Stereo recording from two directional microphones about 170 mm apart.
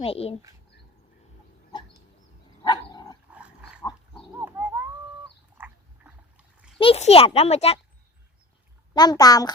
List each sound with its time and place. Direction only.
0.0 s a child's voice: 35° left (ahead or behind)
2.6 s dog: 25° left (ahead or behind)
3.2 s dog: 5° right (ahead or behind)
3.8 s pig: 30° left (ahead or behind)
4.4 s a sound: 10° right (ahead or behind)
5.5 s cat: 10° right (ahead or behind)
6.7 s a child's voice: 35° left (ahead or behind)
9.0 s a woman's voice: 25° left (ahead or behind)